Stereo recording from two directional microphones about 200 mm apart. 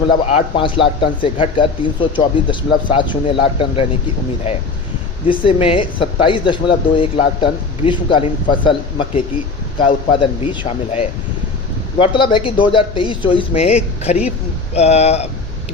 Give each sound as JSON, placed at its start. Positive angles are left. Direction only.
{"t": 0.3, "sound": "speech", "side_deg": 30}
{"t": 5.3, "sound": "speech", "side_deg": 25}